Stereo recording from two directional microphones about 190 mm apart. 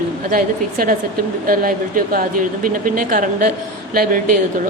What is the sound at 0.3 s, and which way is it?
A woman's voice, 50° right (ahead or behind).